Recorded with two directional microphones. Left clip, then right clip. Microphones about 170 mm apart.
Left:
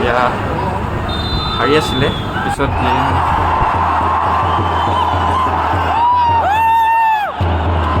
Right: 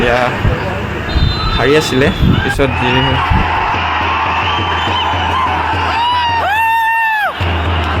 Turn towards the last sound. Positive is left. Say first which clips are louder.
# even
turn(degrees=5)  # may be behind; listen again after turning